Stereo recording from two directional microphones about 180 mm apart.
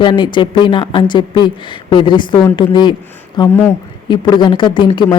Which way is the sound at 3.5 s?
10° left (ahead or behind).